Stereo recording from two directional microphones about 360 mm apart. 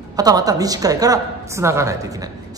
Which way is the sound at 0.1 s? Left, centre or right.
Centre.